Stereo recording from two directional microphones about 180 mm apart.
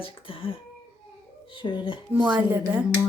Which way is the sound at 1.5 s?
25° left (ahead or behind).